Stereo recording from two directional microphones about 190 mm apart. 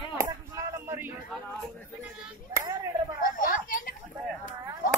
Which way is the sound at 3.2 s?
45° left (ahead or behind).